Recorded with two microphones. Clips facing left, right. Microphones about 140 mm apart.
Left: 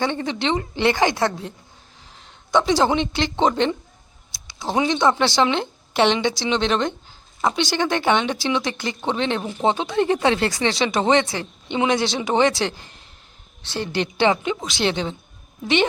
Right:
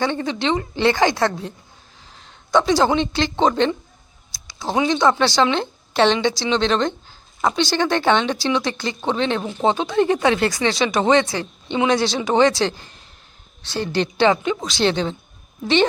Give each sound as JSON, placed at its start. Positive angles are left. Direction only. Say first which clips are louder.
{"t": 0.0, "sound": "speech", "louder": "right 1 dB", "side_deg": 20}
{"t": 4.3, "sound": "a sound", "louder": "right 1 dB", "side_deg": 20}
{"t": 4.9, "sound": "speech", "louder": "right 2 dB", "side_deg": 20}
{"t": 9.4, "sound": "speech", "louder": "right 1 dB", "side_deg": -20}
{"t": 9.6, "sound": "speech", "louder": "right 2 dB", "side_deg": 25}